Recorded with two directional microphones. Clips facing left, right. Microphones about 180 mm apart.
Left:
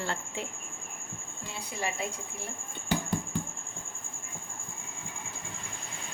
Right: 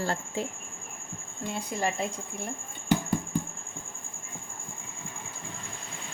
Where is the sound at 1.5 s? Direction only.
45° right (ahead or behind).